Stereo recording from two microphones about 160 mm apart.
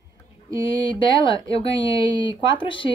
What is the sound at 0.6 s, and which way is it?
Speech, 30° left (ahead or behind).